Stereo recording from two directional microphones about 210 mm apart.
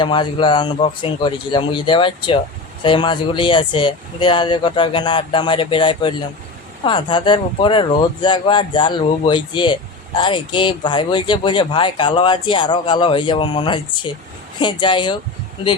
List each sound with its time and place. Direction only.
0.0 s speech: 20° left (ahead or behind)